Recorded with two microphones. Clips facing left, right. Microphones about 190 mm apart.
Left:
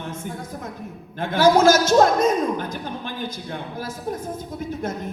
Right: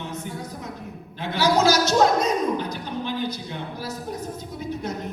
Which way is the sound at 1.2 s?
50° left (ahead or behind).